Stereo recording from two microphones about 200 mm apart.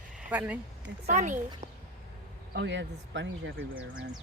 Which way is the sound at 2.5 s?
60° right (ahead or behind).